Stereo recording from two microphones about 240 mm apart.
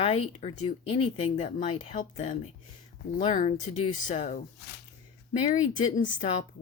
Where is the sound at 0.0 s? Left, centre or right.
Left.